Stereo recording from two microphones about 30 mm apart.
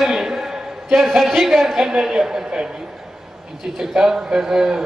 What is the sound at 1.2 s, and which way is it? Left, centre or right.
Speech, centre.